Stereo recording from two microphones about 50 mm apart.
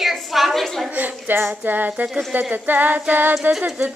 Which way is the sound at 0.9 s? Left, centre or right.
Right.